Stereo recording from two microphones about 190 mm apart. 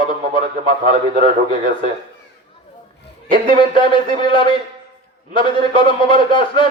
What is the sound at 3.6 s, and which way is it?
Speech, 25° left (ahead or behind).